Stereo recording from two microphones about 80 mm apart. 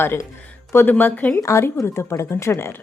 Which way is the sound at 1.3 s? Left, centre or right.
Left.